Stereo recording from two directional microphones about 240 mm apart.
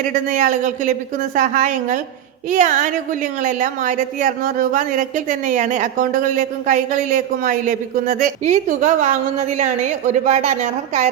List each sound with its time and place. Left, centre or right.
0.1 s a woman's voice: right